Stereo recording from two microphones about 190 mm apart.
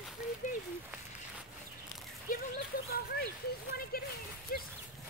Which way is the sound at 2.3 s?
50° left (ahead or behind).